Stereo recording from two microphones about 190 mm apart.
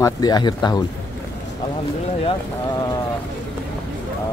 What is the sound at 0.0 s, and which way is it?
Speech, 20° left (ahead or behind).